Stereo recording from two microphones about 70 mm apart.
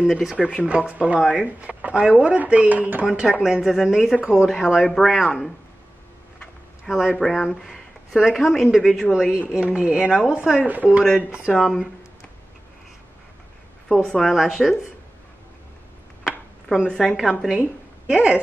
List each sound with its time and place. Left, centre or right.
0.0 s speech: centre
0.7 s speech: centre
3.1 s speech: centre
6.9 s speech: centre
7.2 s a woman's voice: centre
11.5 s speech: centre
13.8 s a woman's voice: centre
16.3 s a sound: centre
17.2 s speech: centre
18.0 s speech: centre